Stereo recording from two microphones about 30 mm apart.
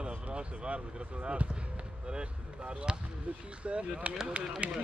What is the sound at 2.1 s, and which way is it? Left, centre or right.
Speech, right.